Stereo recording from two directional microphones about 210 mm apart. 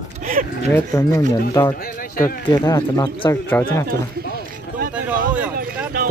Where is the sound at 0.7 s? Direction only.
15° left (ahead or behind).